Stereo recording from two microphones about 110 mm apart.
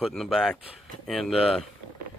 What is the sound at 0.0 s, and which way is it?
Speech, centre (ahead or behind).